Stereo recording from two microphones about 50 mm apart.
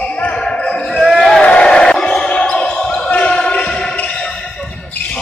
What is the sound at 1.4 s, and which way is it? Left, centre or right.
Music, left.